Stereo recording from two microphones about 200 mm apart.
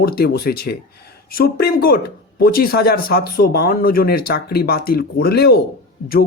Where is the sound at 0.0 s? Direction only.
50° left (ahead or behind).